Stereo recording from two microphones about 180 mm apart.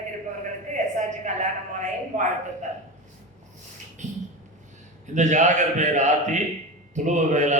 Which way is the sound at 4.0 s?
40° right (ahead or behind).